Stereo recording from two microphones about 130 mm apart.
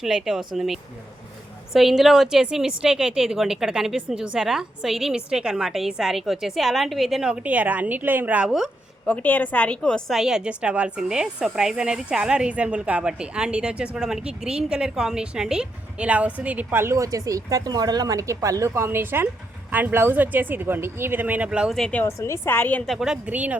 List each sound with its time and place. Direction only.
0.0 s a woman's voice: 5° right (ahead or behind)
9.0 s a woman's voice: 10° left (ahead or behind); by 21.8 s 10° right (ahead or behind)
21.8 s a woman's voice: 5° left (ahead or behind)
22.0 s a woman's voice: 20° left (ahead or behind)
22.9 s a woman's voice: 5° right (ahead or behind)